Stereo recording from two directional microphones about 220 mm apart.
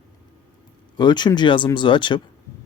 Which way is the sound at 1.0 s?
20° left (ahead or behind).